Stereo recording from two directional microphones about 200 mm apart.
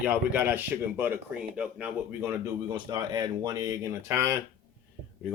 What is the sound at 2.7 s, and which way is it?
Speech, 20° right (ahead or behind).